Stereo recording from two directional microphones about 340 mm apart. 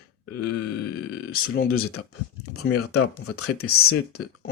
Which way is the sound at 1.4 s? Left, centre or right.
Left.